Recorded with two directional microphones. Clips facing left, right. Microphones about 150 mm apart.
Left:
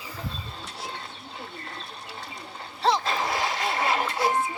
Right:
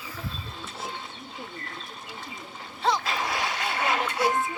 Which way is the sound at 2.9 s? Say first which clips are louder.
Left 2 dB; 25° left (ahead or behind).